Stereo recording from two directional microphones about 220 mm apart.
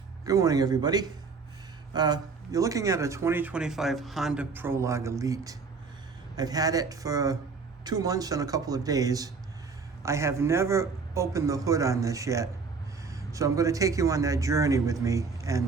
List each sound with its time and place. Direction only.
0.3 s speech: 15° right (ahead or behind)